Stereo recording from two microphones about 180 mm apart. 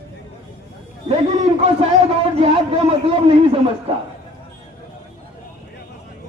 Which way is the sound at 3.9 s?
35° right (ahead or behind).